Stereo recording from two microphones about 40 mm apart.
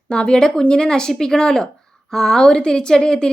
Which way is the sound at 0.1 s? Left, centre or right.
Left.